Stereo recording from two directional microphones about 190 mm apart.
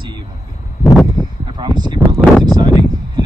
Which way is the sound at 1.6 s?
20° right (ahead or behind).